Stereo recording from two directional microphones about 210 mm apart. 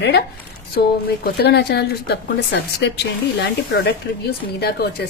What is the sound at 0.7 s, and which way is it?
A woman's voice, 50° left (ahead or behind).